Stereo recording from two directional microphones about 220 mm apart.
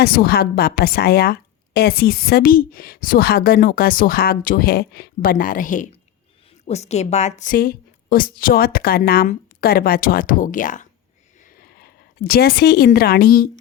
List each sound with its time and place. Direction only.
0.0 s a woman's voice: 45° left (ahead or behind)